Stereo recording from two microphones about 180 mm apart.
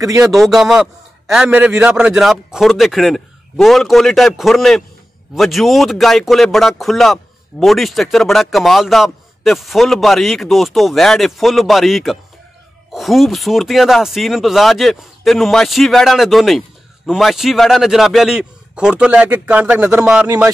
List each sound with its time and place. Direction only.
0.2 s speech: centre (ahead or behind)
20.2 s speech: 15° right (ahead or behind)